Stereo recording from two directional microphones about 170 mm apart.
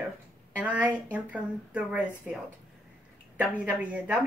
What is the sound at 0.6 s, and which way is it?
A woman's voice, 10° right (ahead or behind).